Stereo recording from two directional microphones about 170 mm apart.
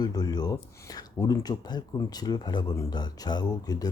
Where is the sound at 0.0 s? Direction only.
25° left (ahead or behind).